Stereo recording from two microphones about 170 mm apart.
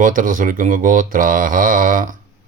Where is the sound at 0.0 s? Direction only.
50° right (ahead or behind).